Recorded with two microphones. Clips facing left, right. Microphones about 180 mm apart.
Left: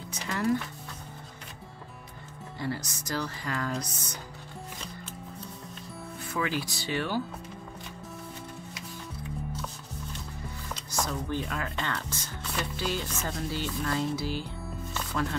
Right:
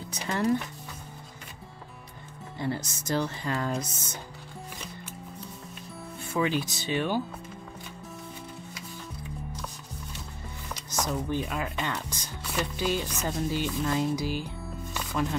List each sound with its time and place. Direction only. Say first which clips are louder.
2.6 s speech: right 2 dB; 25° right (ahead or behind)
6.3 s speech: right 4 dB; 20° right (ahead or behind)
10.9 s speech: right 2 dB; 20° right (ahead or behind)
15.0 s music: right 2 dB; 15° right (ahead or behind)